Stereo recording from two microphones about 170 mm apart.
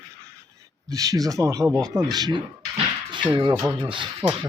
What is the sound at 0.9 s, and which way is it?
A man's voice, 20° right (ahead or behind).